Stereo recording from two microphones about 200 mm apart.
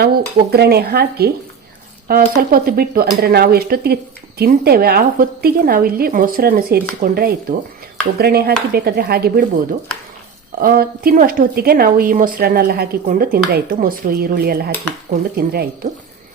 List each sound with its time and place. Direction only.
0.0 s a woman's voice: 50° right (ahead or behind)
10.6 s a woman's voice: 50° right (ahead or behind)